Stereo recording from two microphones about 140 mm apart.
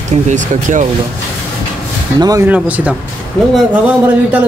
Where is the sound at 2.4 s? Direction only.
10° right (ahead or behind).